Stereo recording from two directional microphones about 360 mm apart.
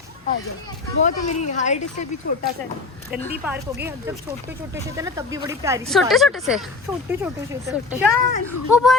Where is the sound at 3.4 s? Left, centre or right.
Centre.